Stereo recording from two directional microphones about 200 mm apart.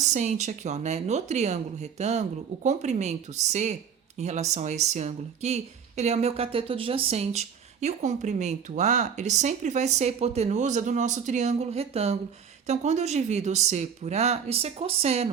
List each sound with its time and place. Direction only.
0.0 s speech: 35° right (ahead or behind)